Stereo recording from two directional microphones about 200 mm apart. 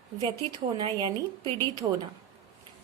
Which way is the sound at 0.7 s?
25° right (ahead or behind).